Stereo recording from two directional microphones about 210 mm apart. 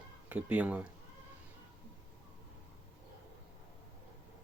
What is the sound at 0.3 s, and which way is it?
Speech, 5° right (ahead or behind).